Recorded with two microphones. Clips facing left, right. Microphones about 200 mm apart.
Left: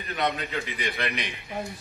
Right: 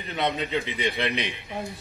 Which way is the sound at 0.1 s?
20° right (ahead or behind).